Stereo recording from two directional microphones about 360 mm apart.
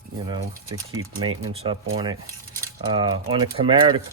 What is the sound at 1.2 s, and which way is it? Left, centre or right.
Speech, centre.